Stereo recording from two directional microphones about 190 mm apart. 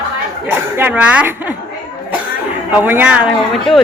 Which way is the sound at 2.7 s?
10° right (ahead or behind).